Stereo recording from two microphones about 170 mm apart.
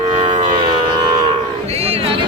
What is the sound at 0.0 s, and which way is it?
Civil defense siren, 45° right (ahead or behind).